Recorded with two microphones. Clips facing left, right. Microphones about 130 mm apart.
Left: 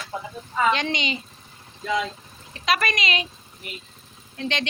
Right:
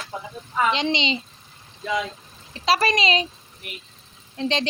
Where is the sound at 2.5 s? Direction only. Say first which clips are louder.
Right 3 dB; 30° right (ahead or behind).